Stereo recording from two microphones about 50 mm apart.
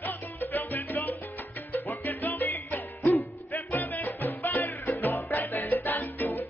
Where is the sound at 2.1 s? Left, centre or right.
Left.